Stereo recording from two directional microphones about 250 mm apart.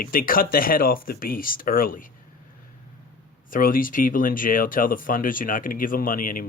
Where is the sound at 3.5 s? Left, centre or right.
Left.